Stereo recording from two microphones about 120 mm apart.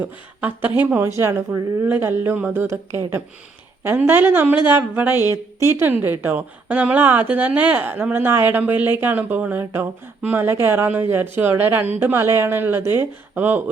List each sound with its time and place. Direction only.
0.0 s a woman's voice: 15° right (ahead or behind)